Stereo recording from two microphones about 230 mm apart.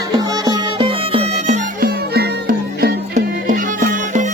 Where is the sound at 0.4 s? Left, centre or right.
Right.